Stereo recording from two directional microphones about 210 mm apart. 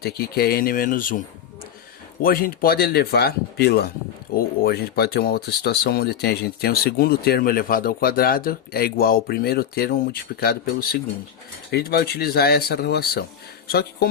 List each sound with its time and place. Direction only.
0.0 s speech: 50° left (ahead or behind)
2.2 s speech: 45° left (ahead or behind)